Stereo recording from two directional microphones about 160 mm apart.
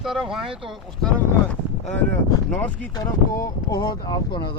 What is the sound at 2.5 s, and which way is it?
Speech, 10° left (ahead or behind).